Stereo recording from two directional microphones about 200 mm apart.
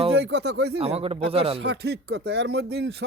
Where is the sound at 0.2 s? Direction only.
60° right (ahead or behind).